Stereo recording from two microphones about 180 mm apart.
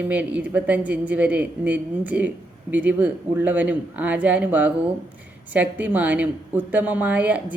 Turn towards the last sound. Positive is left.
turn(degrees=-5)  # may be behind; listen again after turning